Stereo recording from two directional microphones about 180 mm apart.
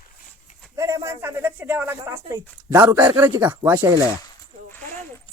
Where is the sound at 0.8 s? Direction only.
15° right (ahead or behind).